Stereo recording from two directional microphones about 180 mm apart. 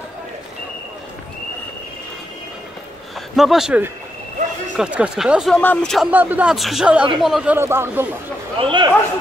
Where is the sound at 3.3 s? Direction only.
Centre (ahead or behind).